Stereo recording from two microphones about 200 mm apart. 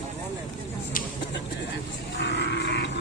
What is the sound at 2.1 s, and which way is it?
Grunt, 60° left (ahead or behind).